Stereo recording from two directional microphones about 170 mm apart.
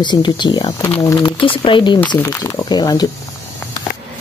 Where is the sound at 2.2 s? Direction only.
15° left (ahead or behind).